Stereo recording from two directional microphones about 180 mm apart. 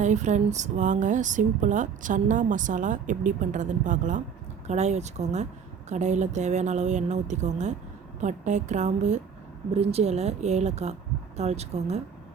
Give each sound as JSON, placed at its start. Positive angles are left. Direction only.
{"t": 0.0, "sound": "speech", "side_deg": -40}